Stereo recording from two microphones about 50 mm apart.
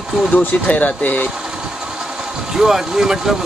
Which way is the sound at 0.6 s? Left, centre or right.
Left.